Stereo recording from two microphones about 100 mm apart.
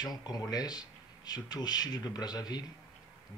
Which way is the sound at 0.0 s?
40° left (ahead or behind).